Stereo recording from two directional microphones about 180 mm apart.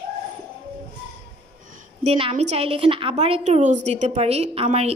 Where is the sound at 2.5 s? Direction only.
30° right (ahead or behind).